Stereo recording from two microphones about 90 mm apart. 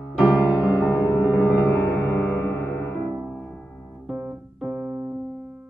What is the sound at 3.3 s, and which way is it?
Music, 5° left (ahead or behind).